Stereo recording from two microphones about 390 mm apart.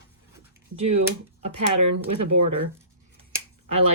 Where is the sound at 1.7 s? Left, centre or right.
Right.